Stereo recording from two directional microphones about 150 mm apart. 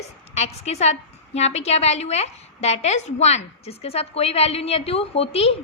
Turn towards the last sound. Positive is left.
turn(degrees=40)  # may be behind; listen again after turning